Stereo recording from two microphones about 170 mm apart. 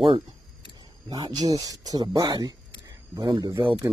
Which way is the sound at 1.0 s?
25° right (ahead or behind).